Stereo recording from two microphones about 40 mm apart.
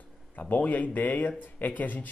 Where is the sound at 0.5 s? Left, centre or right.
Left.